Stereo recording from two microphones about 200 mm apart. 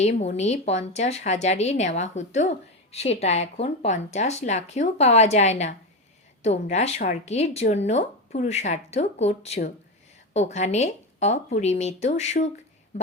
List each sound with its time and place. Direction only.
0.0 s a woman's voice: 35° left (ahead or behind)